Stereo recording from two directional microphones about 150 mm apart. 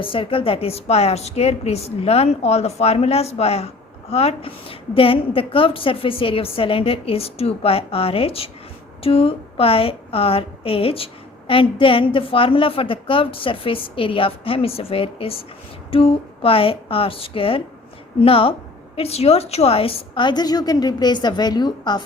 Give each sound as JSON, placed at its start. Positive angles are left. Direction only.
{"t": 0.0, "sound": "a woman's voice", "side_deg": 35}